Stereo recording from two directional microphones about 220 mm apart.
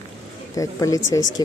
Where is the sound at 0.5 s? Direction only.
15° left (ahead or behind).